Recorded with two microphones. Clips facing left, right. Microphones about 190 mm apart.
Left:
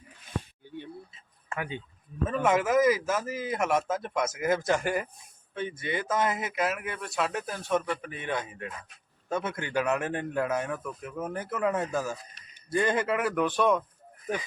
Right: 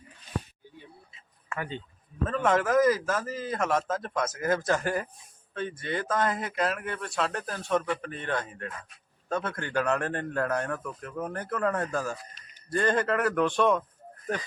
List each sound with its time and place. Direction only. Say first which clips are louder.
1.5 s a man's voice: even; 10° left (ahead or behind)